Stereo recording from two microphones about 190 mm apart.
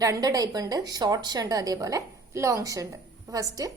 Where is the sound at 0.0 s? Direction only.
20° right (ahead or behind).